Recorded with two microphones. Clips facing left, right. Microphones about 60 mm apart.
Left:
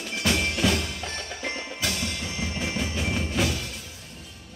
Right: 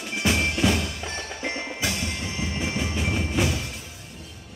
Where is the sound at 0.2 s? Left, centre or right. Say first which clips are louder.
Right 2 dB; centre.